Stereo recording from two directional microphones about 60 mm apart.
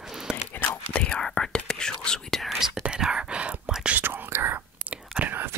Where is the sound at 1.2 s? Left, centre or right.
Centre.